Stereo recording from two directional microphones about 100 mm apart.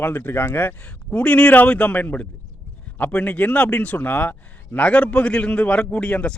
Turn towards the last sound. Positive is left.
turn(degrees=10)  # may be behind; listen again after turning